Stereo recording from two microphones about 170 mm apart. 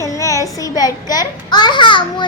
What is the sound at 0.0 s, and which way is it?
A child's voice, 20° left (ahead or behind).